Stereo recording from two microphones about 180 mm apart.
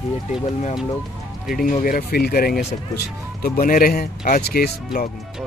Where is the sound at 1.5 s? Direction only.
50° left (ahead or behind).